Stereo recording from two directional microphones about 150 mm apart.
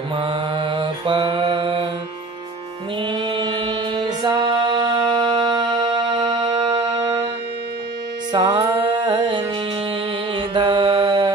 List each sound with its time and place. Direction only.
0.1 s mantra: 35° right (ahead or behind)
3.0 s singing: 30° right (ahead or behind)
8.3 s music: 40° right (ahead or behind)
10.3 s mantra: 30° right (ahead or behind)